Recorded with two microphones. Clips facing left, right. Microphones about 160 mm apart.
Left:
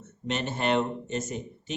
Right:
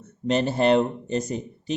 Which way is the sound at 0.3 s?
35° right (ahead or behind).